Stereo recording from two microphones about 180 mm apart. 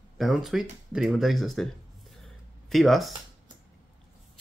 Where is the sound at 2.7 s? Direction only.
Centre (ahead or behind).